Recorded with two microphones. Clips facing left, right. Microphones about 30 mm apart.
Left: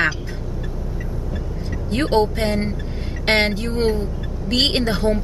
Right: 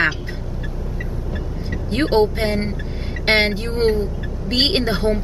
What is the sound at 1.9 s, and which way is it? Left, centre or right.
A woman's voice, centre.